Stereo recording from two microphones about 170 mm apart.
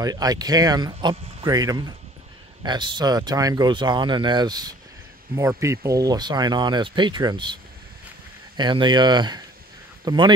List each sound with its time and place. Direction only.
0.0 s speech: 20° right (ahead or behind)
8.5 s speech: 25° right (ahead or behind)